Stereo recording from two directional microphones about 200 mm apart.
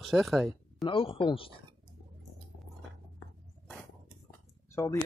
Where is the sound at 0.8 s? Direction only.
25° left (ahead or behind).